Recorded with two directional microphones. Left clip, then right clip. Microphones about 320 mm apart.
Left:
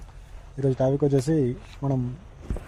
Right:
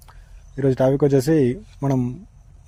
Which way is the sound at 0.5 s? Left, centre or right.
Right.